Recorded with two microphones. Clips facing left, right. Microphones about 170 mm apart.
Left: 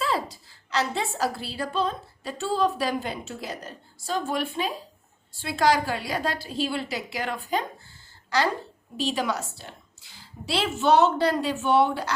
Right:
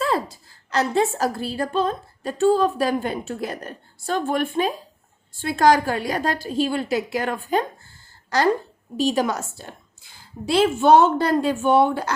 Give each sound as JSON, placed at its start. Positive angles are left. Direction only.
{"t": 0.0, "sound": "a woman's voice", "side_deg": -50}